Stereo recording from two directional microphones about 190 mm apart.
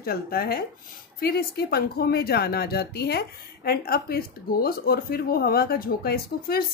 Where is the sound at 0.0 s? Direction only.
50° left (ahead or behind).